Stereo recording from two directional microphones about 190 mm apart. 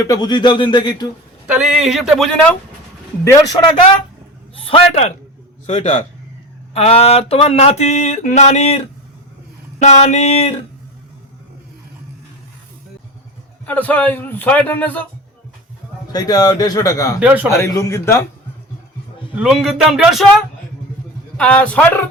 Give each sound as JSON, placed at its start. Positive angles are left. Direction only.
{"t": 0.0, "sound": "speech", "side_deg": 20}
{"t": 1.5, "sound": "speech", "side_deg": -5}
{"t": 4.5, "sound": "a man's voice", "side_deg": 30}
{"t": 5.6, "sound": "a sound", "side_deg": 30}
{"t": 9.8, "sound": "a sound", "side_deg": 35}
{"t": 13.7, "sound": "a man's voice", "side_deg": 10}
{"t": 16.1, "sound": "speech", "side_deg": 20}
{"t": 17.2, "sound": "speech", "side_deg": -10}
{"t": 17.6, "sound": "a man's voice", "side_deg": 15}
{"t": 19.4, "sound": "speech", "side_deg": 0}
{"t": 21.3, "sound": "a man's voice", "side_deg": 5}